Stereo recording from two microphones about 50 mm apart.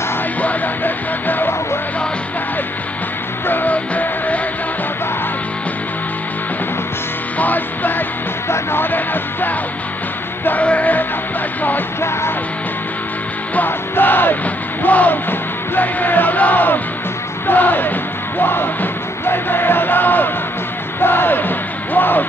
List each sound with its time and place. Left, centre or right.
0.4 s music: left
3.4 s music: left
3.7 s music: left
7.3 s music: left
10.6 s music: left
13.6 s music: left